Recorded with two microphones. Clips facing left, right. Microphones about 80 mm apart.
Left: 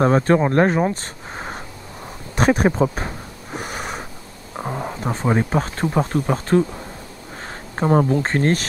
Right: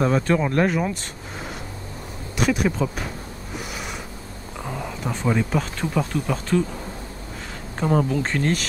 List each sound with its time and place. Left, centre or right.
0.0 s speech: left
2.3 s speech: left
3.5 s gasp: left
4.6 s speech: left
7.8 s speech: left